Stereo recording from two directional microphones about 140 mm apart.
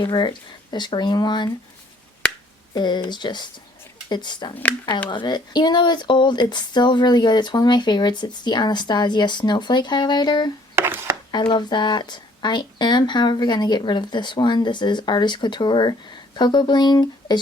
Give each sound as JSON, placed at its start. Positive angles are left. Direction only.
{"t": 0.0, "sound": "speech", "side_deg": 30}
{"t": 2.7, "sound": "speech", "side_deg": 30}
{"t": 10.8, "sound": "a sound", "side_deg": -15}
{"t": 11.3, "sound": "speech", "side_deg": 30}